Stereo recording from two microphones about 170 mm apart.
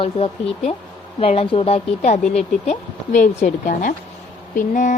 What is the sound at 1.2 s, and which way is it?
Speech, 35° left (ahead or behind).